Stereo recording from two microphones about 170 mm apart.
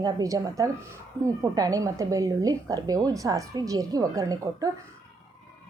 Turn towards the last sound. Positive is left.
turn(degrees=-20)  # may be behind; listen again after turning